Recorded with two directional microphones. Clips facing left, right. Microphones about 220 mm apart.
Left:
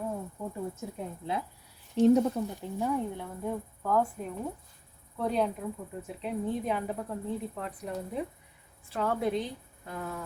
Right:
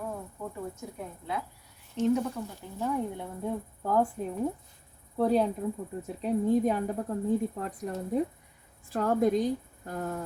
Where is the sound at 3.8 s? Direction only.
30° right (ahead or behind).